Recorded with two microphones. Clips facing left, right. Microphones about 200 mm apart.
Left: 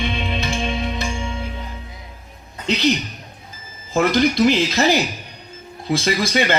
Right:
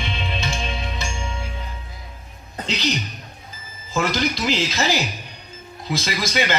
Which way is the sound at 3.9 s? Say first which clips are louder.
Left 6 dB; 55° left (ahead or behind).